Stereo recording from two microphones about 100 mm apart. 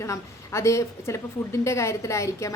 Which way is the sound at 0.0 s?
30° left (ahead or behind).